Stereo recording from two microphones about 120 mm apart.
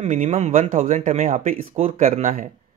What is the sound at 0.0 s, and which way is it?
Speech, 80° right.